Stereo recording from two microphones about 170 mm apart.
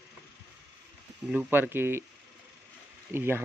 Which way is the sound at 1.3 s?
10° right (ahead or behind).